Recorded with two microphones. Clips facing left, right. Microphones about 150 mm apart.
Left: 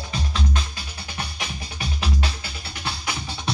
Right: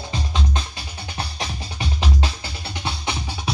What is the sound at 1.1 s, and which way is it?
Music, 30° right (ahead or behind).